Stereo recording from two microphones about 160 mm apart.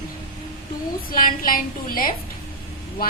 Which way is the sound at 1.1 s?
60° left (ahead or behind).